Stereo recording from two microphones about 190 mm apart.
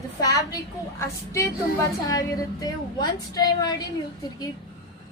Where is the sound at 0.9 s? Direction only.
15° left (ahead or behind).